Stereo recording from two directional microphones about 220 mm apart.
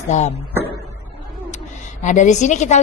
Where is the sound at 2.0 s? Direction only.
35° left (ahead or behind).